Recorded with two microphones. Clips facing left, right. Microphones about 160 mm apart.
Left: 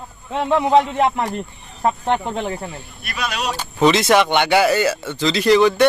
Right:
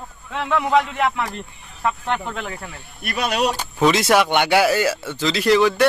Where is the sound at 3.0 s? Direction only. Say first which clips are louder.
Right 5 dB; 55° right (ahead or behind).